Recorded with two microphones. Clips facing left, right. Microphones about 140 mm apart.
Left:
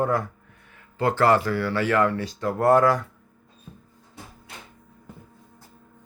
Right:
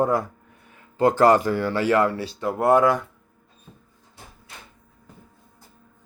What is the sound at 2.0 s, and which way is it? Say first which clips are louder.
Speech: right 1 dB; 30° right (ahead or behind).